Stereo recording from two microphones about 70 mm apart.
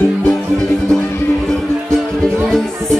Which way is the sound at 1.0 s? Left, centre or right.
Left.